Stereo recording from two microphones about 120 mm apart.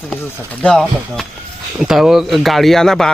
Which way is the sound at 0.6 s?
5° left (ahead or behind).